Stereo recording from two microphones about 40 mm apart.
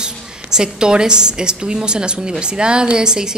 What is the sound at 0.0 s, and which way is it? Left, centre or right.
A woman's voice, centre.